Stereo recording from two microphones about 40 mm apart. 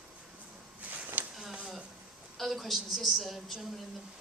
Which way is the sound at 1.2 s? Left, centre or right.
Right.